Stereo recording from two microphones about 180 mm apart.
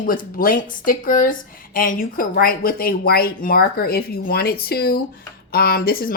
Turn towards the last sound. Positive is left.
turn(degrees=55)  # may be behind; listen again after turning